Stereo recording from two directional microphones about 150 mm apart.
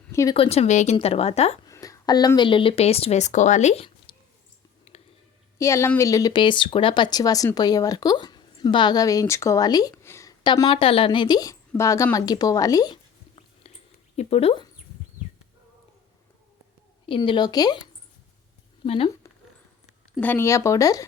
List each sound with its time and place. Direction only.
0.1 s speech: 20° left (ahead or behind)
0.3 s speech: 45° left (ahead or behind)
1.6 s a woman's voice: 20° left (ahead or behind); by 3.8 s 50° left (ahead or behind)
4.1 s a sound: 35° left (ahead or behind)
4.9 s whispering: 40° left (ahead or behind)
5.5 s speech: 20° left (ahead or behind)
10.4 s speech: 30° left (ahead or behind)
14.2 s a woman's voice: 40° left (ahead or behind)
17.1 s speech: 35° left (ahead or behind)
18.9 s a woman's voice: 40° left (ahead or behind)
20.1 s speech: 15° left (ahead or behind)